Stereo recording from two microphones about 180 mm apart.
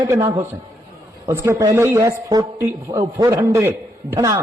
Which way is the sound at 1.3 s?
15° right (ahead or behind).